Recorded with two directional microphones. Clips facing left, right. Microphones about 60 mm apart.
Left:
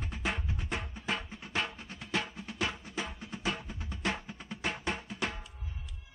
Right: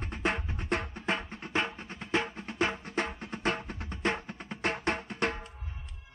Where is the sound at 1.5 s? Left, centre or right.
Right.